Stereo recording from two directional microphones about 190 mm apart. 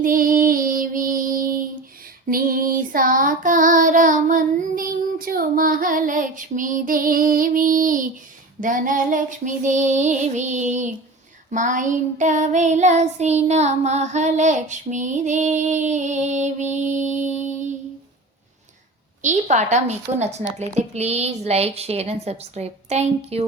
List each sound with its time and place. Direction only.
0.0 s child singing: 45° right (ahead or behind)
16.7 s music: 40° right (ahead or behind)
19.2 s child singing: 40° right (ahead or behind)